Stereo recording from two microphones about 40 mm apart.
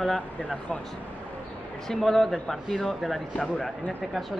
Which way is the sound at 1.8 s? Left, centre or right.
Centre.